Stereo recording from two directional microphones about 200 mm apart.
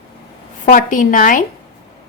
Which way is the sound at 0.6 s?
45° left (ahead or behind).